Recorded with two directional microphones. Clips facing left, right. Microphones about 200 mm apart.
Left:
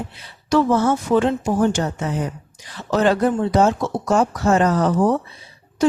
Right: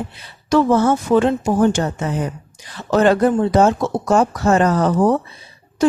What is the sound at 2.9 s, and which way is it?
Speech, 55° right (ahead or behind).